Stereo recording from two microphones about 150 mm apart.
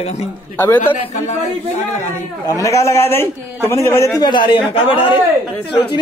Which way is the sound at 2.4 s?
20° left (ahead or behind).